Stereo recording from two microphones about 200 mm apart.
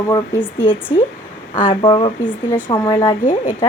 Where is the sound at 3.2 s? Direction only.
40° left (ahead or behind).